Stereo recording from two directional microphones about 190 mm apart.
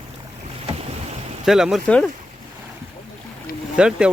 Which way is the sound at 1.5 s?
Centre (ahead or behind).